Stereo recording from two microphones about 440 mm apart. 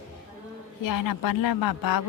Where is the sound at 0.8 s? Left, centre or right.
Left.